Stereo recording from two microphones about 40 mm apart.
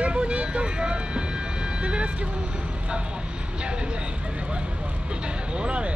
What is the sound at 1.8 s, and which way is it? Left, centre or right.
Speech, right.